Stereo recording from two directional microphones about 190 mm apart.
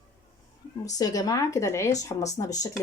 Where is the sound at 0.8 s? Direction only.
20° left (ahead or behind).